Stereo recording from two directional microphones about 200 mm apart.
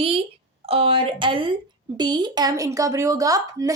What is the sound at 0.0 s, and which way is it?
A woman's voice, 30° right (ahead or behind).